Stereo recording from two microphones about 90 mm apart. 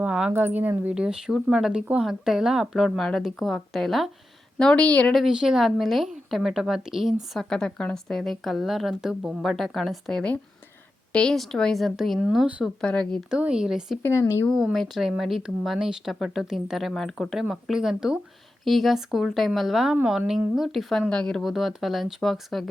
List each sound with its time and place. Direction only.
0.0 s a sound: 15° right (ahead or behind)
0.3 s a woman's voice: 20° right (ahead or behind); by 5.1 s 15° left (ahead or behind)
5.1 s speech: 5° right (ahead or behind)
12.8 s a woman's voice: 10° left (ahead or behind)
13.3 s speech: 10° right (ahead or behind)
14.0 s speech: 30° left (ahead or behind)
14.5 s a woman's voice: centre (ahead or behind)